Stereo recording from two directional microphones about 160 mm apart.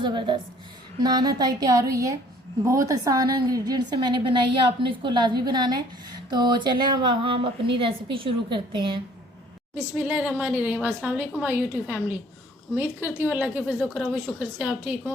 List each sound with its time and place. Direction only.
0.0 s a woman's voice: 30° right (ahead or behind)
9.7 s a woman's voice: 5° right (ahead or behind)